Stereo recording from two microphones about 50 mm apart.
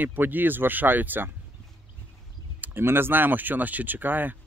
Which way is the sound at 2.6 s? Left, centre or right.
Right.